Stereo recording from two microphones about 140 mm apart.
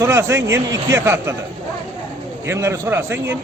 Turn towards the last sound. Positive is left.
turn(degrees=-15)  # may be behind; listen again after turning